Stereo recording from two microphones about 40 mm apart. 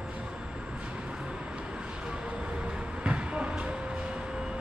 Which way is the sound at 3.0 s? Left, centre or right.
Right.